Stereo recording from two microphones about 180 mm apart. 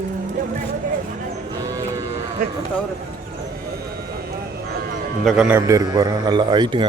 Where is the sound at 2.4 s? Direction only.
55° right (ahead or behind).